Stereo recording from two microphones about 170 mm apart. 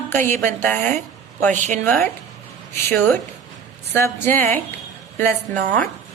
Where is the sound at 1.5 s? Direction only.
45° right (ahead or behind).